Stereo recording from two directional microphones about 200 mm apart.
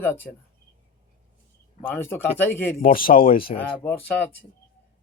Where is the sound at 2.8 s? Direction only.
45° left (ahead or behind).